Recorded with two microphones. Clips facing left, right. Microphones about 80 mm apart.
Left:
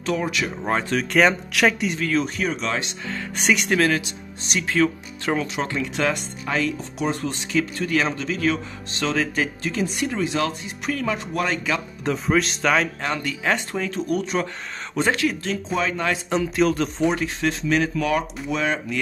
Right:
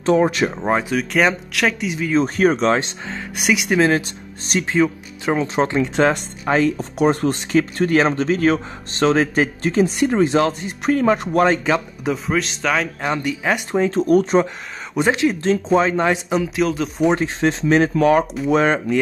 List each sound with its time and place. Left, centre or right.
0.0 s a man's voice: right
0.6 s speech: centre
2.2 s a man's voice: right
3.3 s speech: centre
5.6 s a man's voice: right
7.0 s a man's voice: right
12.0 s speech: centre
13.0 s speech: centre; by 14.4 s right
15.0 s speech: right
16.3 s speech: centre
17.1 s a man's voice: right